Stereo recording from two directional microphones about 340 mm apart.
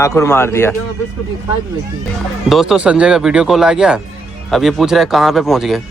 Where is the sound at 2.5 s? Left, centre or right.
Centre.